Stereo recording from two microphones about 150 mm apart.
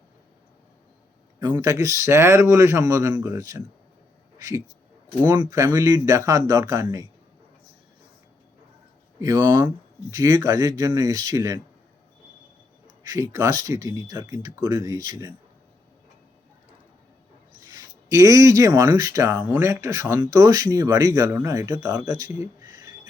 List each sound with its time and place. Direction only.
1.5 s speech: 20° right (ahead or behind)
4.4 s a sound: 20° right (ahead or behind)
5.2 s speech: 15° right (ahead or behind)
9.2 s speech: 15° right (ahead or behind)
13.0 s speech: 20° right (ahead or behind)
17.7 s speech: 25° right (ahead or behind)